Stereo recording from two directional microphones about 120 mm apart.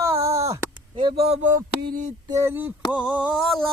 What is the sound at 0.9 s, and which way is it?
Speech, 45° right (ahead or behind).